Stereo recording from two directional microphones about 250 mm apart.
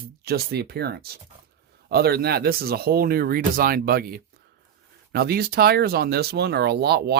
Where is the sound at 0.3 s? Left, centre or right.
Right.